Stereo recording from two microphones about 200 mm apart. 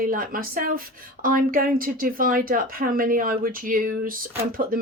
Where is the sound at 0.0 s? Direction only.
45° right (ahead or behind).